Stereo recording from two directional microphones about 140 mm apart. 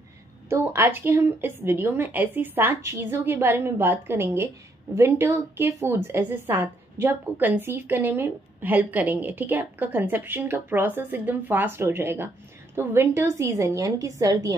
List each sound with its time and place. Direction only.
0.5 s a woman's voice: 15° right (ahead or behind)